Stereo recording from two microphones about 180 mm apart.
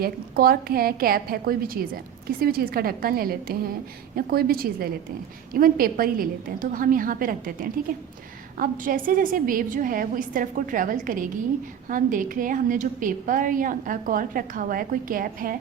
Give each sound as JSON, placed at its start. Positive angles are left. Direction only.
{"t": 0.0, "sound": "a woman's voice", "side_deg": -55}